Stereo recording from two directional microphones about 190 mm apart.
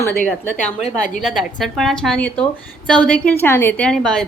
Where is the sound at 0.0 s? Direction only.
10° left (ahead or behind).